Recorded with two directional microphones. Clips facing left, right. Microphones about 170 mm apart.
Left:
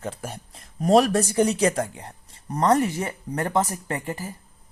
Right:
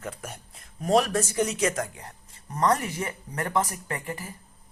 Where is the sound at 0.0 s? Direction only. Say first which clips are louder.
Left 4 dB; 30° left (ahead or behind).